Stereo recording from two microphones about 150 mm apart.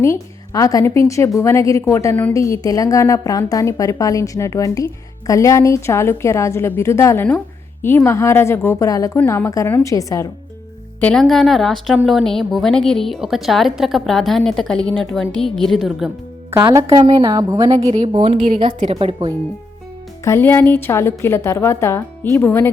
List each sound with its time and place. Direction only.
0.0 s a woman's voice: 20° left (ahead or behind)
11.0 s a woman's voice: 5° left (ahead or behind)
16.5 s a woman's voice: 20° right (ahead or behind)
16.9 s a woman's voice: 30° right (ahead or behind)
17.9 s a woman's voice: 40° right (ahead or behind)
20.2 s a woman's voice: 15° left (ahead or behind)